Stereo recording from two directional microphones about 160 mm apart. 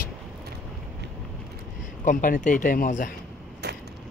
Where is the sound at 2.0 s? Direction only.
60° left (ahead or behind).